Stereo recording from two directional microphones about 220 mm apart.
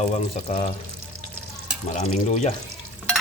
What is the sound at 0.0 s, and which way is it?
Speech, 30° left (ahead or behind).